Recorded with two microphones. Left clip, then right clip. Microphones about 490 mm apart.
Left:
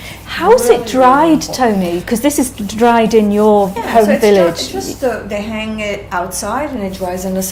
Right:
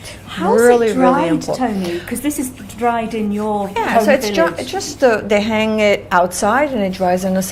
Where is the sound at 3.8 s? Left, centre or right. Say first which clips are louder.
Right 2 dB; right.